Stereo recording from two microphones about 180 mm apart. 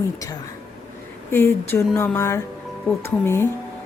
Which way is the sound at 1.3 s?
15° left (ahead or behind).